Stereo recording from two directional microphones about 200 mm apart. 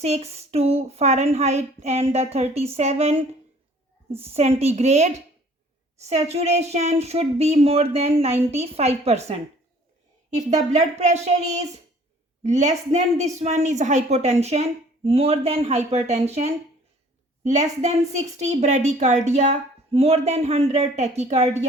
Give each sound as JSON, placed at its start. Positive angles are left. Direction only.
{"t": 0.0, "sound": "a woman's voice", "side_deg": -35}